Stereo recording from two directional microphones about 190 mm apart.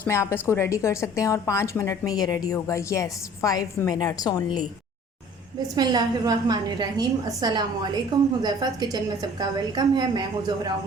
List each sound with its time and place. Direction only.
0.0 s a woman's voice: 15° left (ahead or behind)
5.7 s a woman's voice: 20° right (ahead or behind)